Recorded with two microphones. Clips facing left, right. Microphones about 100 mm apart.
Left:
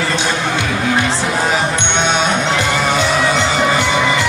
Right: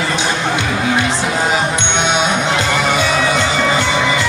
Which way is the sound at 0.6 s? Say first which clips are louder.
Even; 15° right (ahead or behind).